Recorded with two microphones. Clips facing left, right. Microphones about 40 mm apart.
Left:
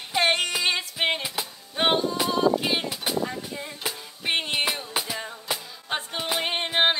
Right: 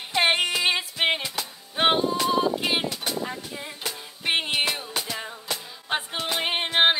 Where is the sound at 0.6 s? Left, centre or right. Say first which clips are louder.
Right 1 dB; centre.